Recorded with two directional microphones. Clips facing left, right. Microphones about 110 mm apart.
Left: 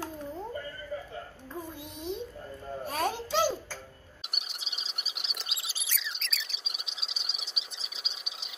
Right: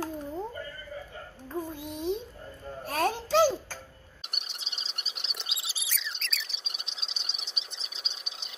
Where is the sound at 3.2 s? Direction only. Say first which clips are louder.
Right 5 dB; 40° right (ahead or behind).